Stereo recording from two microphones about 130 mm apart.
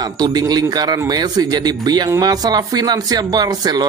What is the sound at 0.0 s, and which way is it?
Speech, 30° right (ahead or behind).